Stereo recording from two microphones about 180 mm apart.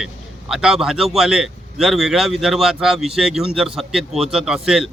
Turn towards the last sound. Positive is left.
turn(degrees=-5)  # may be behind; listen again after turning